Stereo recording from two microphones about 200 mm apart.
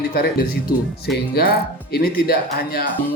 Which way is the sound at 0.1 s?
50° left (ahead or behind).